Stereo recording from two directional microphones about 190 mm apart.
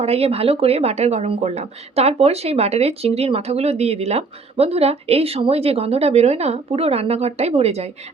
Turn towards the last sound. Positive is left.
turn(degrees=-35)  # may be behind; listen again after turning